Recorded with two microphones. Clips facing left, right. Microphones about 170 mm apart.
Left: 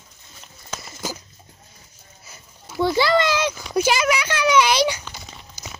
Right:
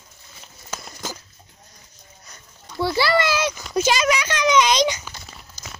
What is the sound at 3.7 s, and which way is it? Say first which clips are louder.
A child's voice: even; 10° left (ahead or behind).